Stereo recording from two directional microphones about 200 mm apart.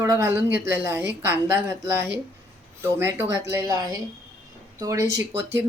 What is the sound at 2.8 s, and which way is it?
Speech, 10° right (ahead or behind).